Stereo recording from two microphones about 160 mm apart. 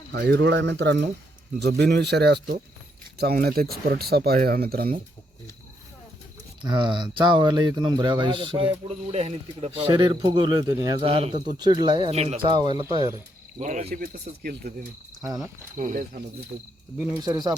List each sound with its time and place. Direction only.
0.1 s speech: 90° right
3.2 s speech: 75° right (ahead or behind)
3.8 s speech: 80° right
6.6 s speech: 30° right (ahead or behind)
11.0 s speech: 35° right (ahead or behind)
11.5 s speech: 25° right (ahead or behind); by 12.5 s 40° right (ahead or behind)
12.5 s speech: 30° right (ahead or behind)
12.8 s speech: 15° right (ahead or behind)
13.6 s speech: 50° right (ahead or behind); by 14.7 s 70° right (ahead or behind)
15.8 s speech: 55° right (ahead or behind)
17.2 s speech: 25° right (ahead or behind)